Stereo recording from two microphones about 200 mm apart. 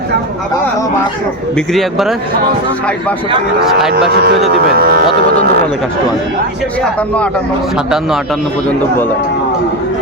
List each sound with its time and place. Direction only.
1.5 s a man's voice: centre (ahead or behind)
4.1 s speech: 50° right (ahead or behind)